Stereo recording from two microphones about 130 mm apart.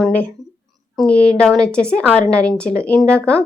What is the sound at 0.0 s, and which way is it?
A woman's voice, 10° left (ahead or behind).